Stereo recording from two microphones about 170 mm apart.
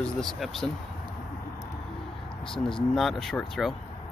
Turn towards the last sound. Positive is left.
turn(degrees=0)  # may be behind; listen again after turning